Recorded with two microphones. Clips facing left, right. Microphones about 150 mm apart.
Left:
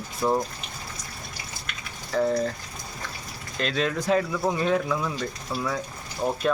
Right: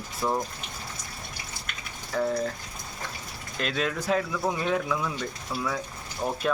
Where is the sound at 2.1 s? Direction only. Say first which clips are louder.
Left 3 dB; 5° right (ahead or behind).